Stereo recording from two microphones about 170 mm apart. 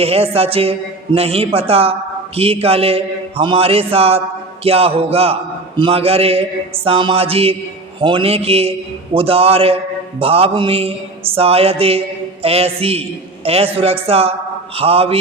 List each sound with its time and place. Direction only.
0.0 s a man's voice: 35° right (ahead or behind)